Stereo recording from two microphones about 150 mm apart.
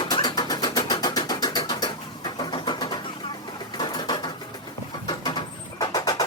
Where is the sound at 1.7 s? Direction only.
30° left (ahead or behind).